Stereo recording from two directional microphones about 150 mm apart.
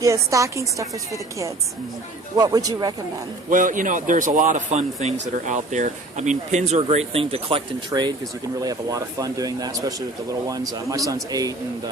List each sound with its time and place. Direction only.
0.0 s speech: 20° right (ahead or behind)
2.3 s speech: 25° right (ahead or behind)
3.5 s speech: 60° right (ahead or behind); by 7.6 s 40° right (ahead or behind)
7.9 s speech: 30° right (ahead or behind)